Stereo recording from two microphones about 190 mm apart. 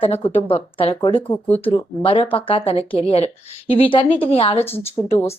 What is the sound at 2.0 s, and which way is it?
Speech, 30° left (ahead or behind).